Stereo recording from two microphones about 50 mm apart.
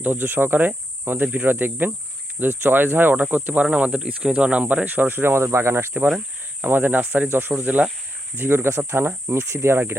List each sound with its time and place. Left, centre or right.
0.0 s speech: right
5.0 s speech: right
6.6 s speech: right
7.6 s speech: right
8.4 s speech: right
9.3 s speech: right